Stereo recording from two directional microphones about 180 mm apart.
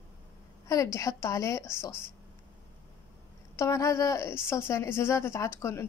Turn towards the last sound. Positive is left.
turn(degrees=15)  # may be behind; listen again after turning